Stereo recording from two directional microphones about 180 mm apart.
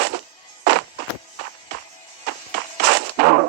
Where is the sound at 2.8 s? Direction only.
65° right (ahead or behind).